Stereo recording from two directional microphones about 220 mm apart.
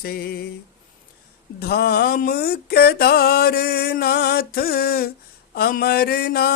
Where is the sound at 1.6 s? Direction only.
45° left (ahead or behind).